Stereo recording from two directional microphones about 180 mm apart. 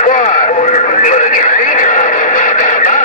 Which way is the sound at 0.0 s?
40° left (ahead or behind).